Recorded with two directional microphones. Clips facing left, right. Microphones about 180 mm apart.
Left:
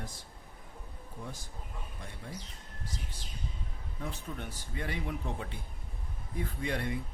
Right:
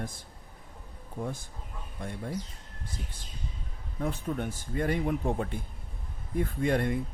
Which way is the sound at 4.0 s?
50° right (ahead or behind).